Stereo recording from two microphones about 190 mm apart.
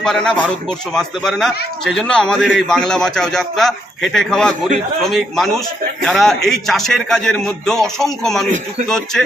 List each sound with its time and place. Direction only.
0.0 s a man's voice: 5° left (ahead or behind)